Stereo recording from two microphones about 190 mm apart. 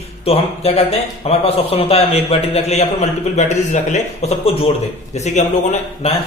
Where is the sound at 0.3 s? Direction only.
30° left (ahead or behind).